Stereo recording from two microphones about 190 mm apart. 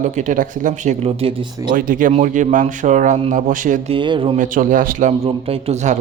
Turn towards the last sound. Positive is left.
turn(degrees=-35)  # may be behind; listen again after turning